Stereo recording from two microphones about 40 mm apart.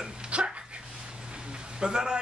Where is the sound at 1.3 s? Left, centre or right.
Right.